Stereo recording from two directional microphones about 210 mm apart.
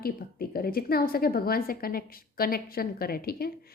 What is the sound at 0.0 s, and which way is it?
A woman's voice, 45° left (ahead or behind).